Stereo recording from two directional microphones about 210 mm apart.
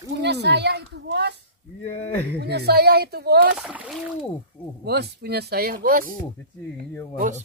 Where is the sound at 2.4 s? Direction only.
50° right (ahead or behind).